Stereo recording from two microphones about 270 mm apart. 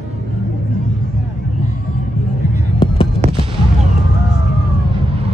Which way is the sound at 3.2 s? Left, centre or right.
Right.